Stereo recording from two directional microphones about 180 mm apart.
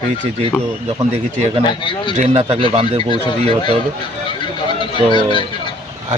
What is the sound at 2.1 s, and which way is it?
Speech, 35° right (ahead or behind).